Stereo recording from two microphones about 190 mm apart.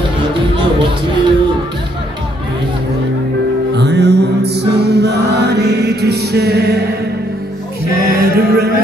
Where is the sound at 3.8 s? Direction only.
65° right (ahead or behind).